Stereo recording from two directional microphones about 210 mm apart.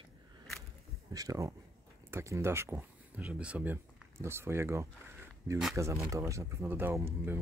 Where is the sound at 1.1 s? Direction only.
15° right (ahead or behind).